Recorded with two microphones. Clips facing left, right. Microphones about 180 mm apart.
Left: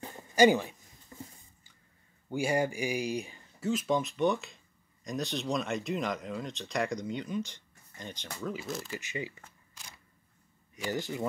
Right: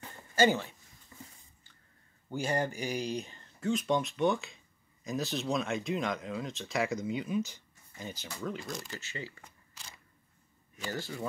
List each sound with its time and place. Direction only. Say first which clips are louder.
0.4 s speech: left 4 dB; 15° left (ahead or behind)
2.2 s speech: left 3 dB; 10° left (ahead or behind)
9.0 s speech: left 5 dB; 15° left (ahead or behind)
10.7 s speech: left 4 dB; 15° left (ahead or behind)